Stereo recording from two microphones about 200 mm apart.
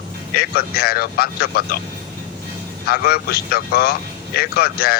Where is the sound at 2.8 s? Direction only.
50° left (ahead or behind).